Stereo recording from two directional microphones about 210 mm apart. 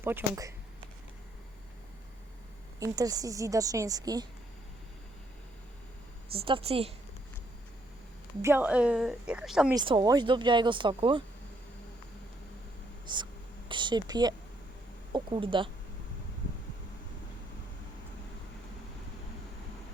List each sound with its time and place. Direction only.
0.0 s a woman's voice: 10° right (ahead or behind)
2.7 s a woman's voice: 15° right (ahead or behind)
6.4 s speech: 25° right (ahead or behind)
8.4 s a woman's voice: 10° right (ahead or behind)
9.7 s speech: 20° right (ahead or behind)
13.1 s speech: 20° right (ahead or behind)
13.7 s a sound: 20° right (ahead or behind)
15.1 s speech: 25° right (ahead or behind)